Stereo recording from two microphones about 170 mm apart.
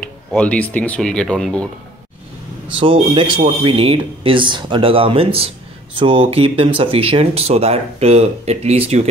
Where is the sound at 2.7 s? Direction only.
30° right (ahead or behind).